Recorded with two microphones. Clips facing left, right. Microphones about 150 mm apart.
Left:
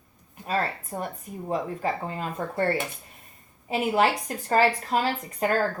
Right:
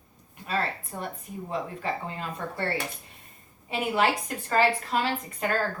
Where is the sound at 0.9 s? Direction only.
35° left (ahead or behind).